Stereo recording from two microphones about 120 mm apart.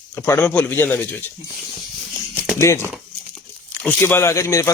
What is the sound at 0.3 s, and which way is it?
Speech, 20° left (ahead or behind).